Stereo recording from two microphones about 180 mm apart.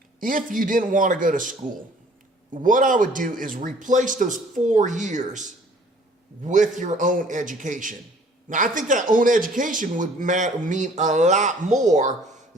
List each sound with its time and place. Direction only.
0.2 s speech: 50° right (ahead or behind)